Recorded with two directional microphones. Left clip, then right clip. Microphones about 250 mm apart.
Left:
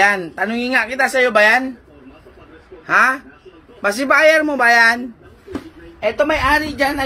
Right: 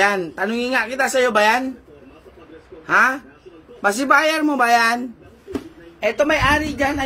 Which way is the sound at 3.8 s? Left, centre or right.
Centre.